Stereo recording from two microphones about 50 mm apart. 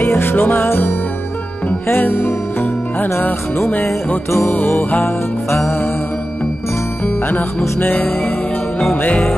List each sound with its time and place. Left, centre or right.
0.0 s music: left
2.0 s music: left
4.6 s music: left
8.3 s music: centre
8.9 s music: left